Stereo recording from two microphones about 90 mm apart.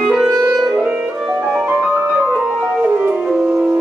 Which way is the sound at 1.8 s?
15° right (ahead or behind).